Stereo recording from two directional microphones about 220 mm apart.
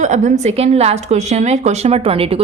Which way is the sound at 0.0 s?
35° right (ahead or behind).